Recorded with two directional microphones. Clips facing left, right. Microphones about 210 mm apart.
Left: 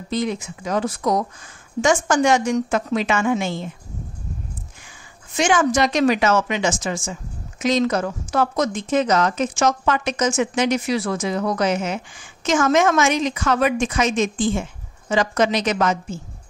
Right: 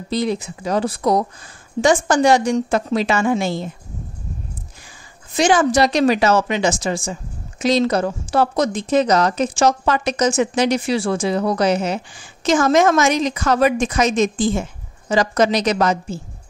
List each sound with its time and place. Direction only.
0.1 s a woman's voice: 35° right (ahead or behind)
5.3 s a woman's voice: 35° right (ahead or behind)